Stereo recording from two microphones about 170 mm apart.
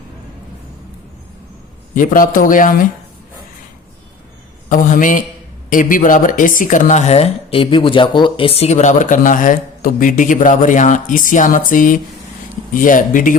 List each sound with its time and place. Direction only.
2.0 s speech: 55° left (ahead or behind)
4.7 s speech: 55° left (ahead or behind)